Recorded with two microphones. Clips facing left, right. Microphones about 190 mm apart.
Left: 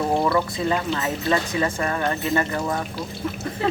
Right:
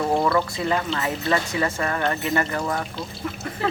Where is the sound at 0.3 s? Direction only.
20° left (ahead or behind).